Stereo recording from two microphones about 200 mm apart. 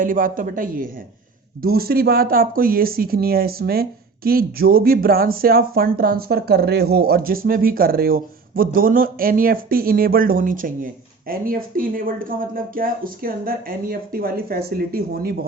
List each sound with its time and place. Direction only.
0.0 s speech: 45° right (ahead or behind)